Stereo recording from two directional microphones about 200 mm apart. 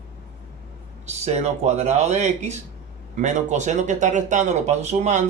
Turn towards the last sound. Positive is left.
turn(degrees=-35)  # may be behind; listen again after turning